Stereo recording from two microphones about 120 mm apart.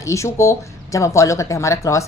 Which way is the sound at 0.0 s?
25° left (ahead or behind).